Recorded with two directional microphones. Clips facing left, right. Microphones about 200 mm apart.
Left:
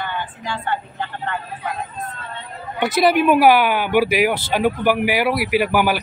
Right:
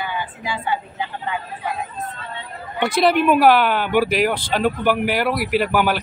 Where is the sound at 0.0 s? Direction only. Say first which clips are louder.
Even; 5° right (ahead or behind).